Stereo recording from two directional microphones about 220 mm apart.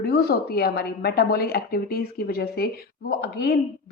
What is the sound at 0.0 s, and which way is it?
A woman's voice, 45° left (ahead or behind).